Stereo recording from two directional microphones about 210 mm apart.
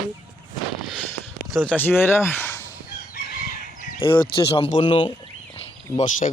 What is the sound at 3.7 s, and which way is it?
Crow, 40° left (ahead or behind).